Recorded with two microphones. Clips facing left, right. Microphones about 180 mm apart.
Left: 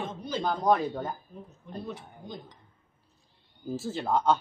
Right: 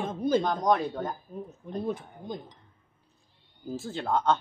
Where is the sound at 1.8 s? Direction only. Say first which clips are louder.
Right 8 dB; 50° right (ahead or behind).